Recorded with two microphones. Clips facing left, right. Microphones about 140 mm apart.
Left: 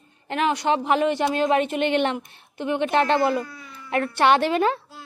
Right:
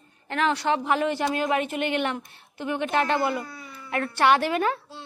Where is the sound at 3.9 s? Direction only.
20° left (ahead or behind).